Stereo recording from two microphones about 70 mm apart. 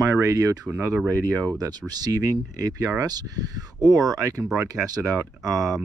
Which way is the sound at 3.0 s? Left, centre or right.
Right.